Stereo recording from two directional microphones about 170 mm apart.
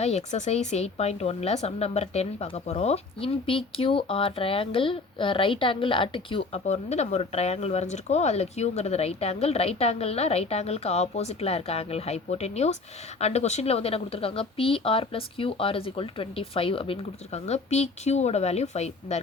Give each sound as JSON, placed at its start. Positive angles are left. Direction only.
{"t": 0.0, "sound": "a woman's voice", "side_deg": 40}